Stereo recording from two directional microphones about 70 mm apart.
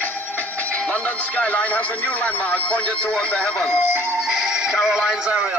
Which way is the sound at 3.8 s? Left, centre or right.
Right.